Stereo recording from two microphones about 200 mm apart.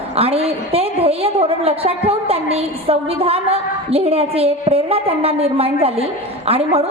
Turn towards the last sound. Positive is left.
turn(degrees=-30)  # may be behind; listen again after turning